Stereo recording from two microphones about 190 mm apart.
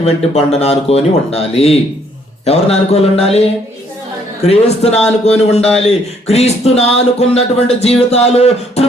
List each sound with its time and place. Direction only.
0.0 s speech: 30° left (ahead or behind)
4.4 s speech: 35° left (ahead or behind)